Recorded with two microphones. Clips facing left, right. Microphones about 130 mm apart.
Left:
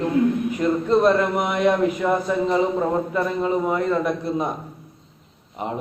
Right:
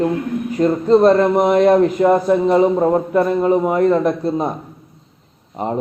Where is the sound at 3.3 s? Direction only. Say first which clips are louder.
Right 6 dB; 10° right (ahead or behind).